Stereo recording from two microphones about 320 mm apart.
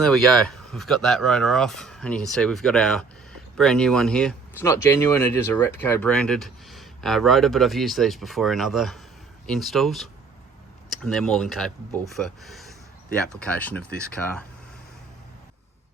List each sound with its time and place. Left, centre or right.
0.0 s speech: centre